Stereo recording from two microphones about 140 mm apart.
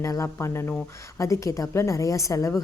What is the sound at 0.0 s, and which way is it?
A woman's voice, 20° left (ahead or behind).